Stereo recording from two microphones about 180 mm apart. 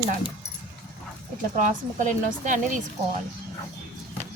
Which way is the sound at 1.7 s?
45° right (ahead or behind).